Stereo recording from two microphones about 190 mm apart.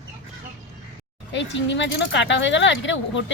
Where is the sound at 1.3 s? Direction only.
70° left (ahead or behind).